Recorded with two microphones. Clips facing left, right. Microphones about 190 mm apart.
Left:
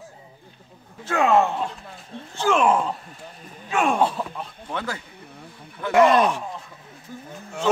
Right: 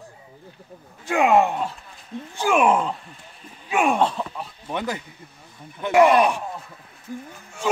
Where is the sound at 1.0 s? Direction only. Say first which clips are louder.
Right 1 dB; 15° right (ahead or behind).